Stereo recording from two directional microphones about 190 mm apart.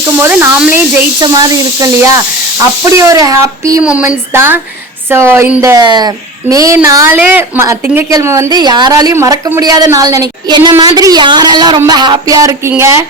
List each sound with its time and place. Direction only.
0.2 s a woman's voice: 10° right (ahead or behind)